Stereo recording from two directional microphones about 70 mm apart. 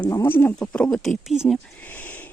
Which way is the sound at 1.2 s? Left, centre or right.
Centre.